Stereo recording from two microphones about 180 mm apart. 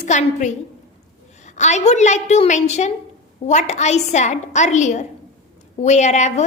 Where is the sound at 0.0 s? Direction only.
40° left (ahead or behind).